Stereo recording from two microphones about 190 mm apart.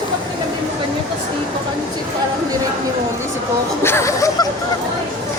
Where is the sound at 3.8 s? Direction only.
15° left (ahead or behind).